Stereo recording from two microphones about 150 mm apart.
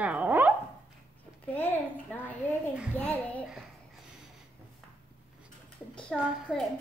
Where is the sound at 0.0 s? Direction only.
10° right (ahead or behind).